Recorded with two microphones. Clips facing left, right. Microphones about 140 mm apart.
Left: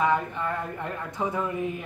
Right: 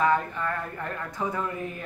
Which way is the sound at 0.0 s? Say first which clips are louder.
Even; 15° left (ahead or behind).